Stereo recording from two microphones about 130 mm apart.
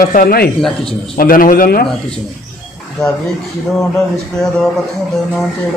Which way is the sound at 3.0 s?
5° left (ahead or behind).